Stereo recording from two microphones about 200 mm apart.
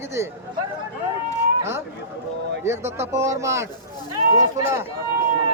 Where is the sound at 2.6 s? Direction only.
10° right (ahead or behind).